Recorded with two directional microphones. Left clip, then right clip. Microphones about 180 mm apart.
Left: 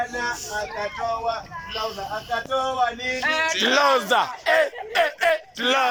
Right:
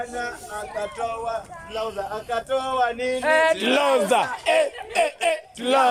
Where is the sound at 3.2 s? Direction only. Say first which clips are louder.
Right 4 dB; 80° right.